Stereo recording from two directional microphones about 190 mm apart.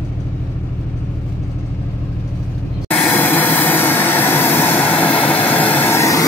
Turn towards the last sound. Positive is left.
turn(degrees=15)  # may be behind; listen again after turning